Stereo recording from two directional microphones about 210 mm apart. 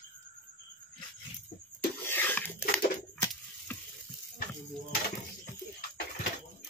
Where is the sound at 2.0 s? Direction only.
10° left (ahead or behind).